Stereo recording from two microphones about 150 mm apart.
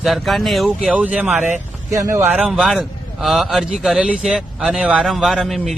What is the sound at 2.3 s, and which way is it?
A man's voice, 5° right (ahead or behind).